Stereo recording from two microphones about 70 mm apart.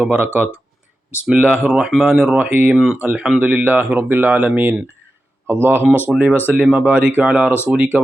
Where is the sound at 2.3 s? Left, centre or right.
Right.